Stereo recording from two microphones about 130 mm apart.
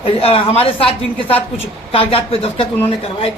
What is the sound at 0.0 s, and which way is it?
A woman's voice, 45° left (ahead or behind).